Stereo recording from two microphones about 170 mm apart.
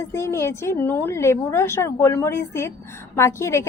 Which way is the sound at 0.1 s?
15° left (ahead or behind).